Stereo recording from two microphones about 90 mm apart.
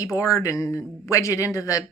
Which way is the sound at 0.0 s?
40° left (ahead or behind).